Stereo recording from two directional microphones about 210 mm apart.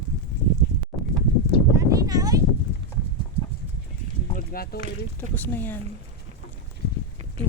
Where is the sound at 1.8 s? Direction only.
15° right (ahead or behind).